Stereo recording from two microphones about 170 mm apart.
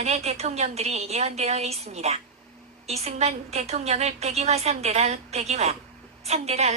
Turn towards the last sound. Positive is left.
turn(degrees=-40)  # may be behind; listen again after turning